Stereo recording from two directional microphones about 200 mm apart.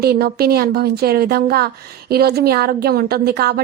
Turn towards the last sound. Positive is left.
turn(degrees=-50)  # may be behind; listen again after turning